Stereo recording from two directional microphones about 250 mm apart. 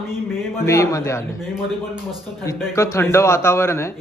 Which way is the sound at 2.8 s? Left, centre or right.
Centre.